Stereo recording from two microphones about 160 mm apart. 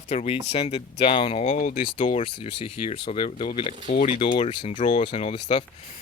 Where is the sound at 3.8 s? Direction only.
55° left (ahead or behind).